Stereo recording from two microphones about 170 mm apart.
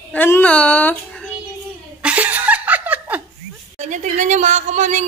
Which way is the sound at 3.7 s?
45° right (ahead or behind).